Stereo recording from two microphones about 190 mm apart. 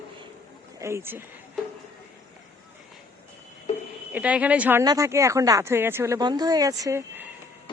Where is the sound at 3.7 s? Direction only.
35° left (ahead or behind).